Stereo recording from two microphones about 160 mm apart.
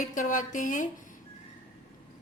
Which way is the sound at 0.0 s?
55° left (ahead or behind).